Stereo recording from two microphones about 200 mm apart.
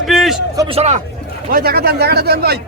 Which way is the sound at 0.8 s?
35° right (ahead or behind).